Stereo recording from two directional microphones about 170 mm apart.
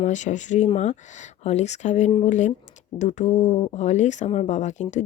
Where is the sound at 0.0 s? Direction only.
45° left (ahead or behind).